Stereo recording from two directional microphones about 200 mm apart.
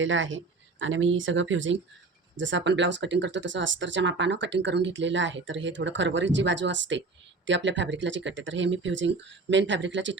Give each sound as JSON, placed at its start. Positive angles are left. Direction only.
{"t": 0.0, "sound": "speech", "side_deg": -70}